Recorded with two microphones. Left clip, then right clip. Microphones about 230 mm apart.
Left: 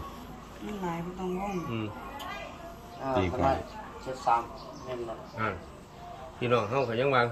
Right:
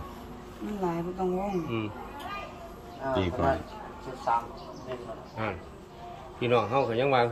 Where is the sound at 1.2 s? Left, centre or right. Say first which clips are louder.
Right 6 dB; centre.